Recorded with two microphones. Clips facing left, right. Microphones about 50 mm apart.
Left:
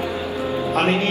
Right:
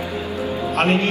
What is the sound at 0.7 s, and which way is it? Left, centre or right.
Speech, right.